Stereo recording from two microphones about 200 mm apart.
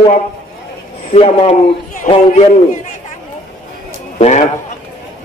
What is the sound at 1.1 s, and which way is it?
A man's voice, 30° left (ahead or behind).